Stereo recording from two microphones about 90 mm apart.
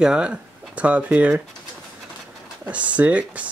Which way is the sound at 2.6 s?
15° right (ahead or behind).